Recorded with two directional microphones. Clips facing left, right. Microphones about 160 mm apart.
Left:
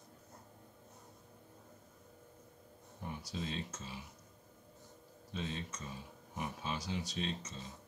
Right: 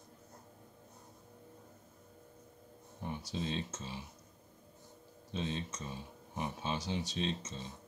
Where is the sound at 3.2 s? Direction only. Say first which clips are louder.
Right 3 dB; 25° right (ahead or behind).